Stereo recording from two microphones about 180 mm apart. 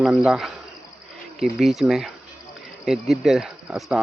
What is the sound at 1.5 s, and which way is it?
Speech, centre (ahead or behind).